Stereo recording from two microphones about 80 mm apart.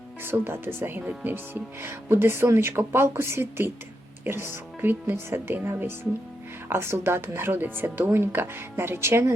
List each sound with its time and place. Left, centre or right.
0.3 s speech: right